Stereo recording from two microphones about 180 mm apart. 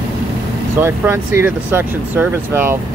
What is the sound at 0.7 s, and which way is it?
Speech, 15° right (ahead or behind).